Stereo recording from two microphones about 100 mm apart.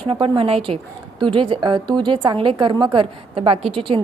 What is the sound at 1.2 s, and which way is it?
A woman's voice, 55° right (ahead or behind).